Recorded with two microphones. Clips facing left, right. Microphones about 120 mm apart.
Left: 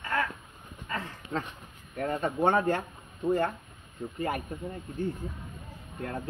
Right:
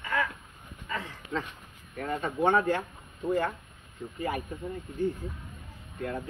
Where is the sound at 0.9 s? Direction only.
40° left (ahead or behind).